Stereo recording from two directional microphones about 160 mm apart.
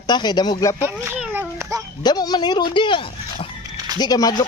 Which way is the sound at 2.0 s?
25° left (ahead or behind).